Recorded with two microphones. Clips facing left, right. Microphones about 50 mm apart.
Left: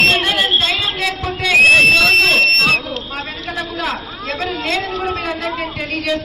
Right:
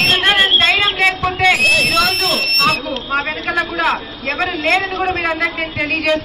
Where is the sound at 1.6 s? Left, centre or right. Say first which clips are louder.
Left 4 dB; left.